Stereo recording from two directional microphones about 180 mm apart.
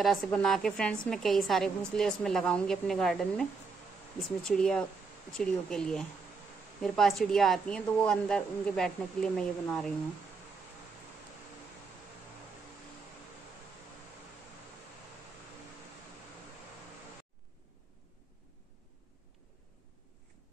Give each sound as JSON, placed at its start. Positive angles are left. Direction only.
{"t": 0.0, "sound": "a woman's voice", "side_deg": 0}